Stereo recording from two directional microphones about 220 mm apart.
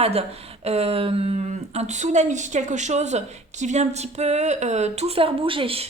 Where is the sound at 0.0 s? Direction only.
30° right (ahead or behind).